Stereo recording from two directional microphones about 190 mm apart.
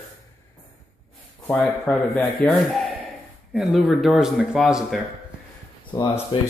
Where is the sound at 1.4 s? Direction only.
5° left (ahead or behind).